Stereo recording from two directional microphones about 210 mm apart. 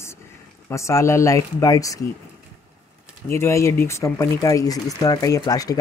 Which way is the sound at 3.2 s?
10° left (ahead or behind).